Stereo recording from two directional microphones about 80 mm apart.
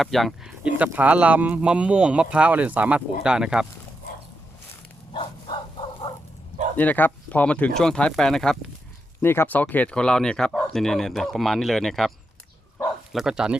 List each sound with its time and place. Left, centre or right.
0.0 s speech: centre
0.6 s speech: centre
6.0 s bow-wow: left
6.7 s speech: left; by 8.5 s centre
9.2 s speech: left; by 12.1 s centre
13.1 s speech: centre